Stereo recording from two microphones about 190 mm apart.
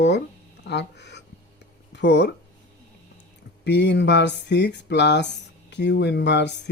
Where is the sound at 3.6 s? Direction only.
65° left (ahead or behind).